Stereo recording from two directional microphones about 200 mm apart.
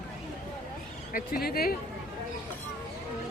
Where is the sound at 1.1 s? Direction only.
45° left (ahead or behind).